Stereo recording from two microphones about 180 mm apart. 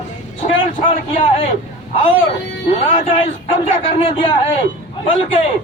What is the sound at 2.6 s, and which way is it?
A man's voice, 35° left (ahead or behind).